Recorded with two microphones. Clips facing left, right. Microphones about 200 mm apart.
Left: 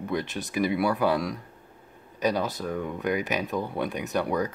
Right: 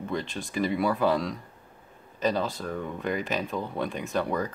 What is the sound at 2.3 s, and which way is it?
Speech, 5° left (ahead or behind).